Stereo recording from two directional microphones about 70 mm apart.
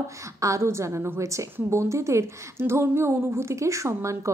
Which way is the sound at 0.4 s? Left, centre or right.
Right.